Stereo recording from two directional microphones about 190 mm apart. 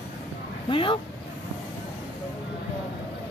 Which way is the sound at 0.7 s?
25° left (ahead or behind).